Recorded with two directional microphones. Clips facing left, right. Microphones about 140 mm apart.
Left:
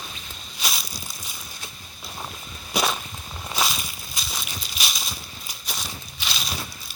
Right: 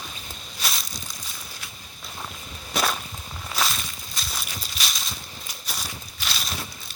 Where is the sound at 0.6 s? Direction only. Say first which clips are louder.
Left 1 dB; 5° left (ahead or behind).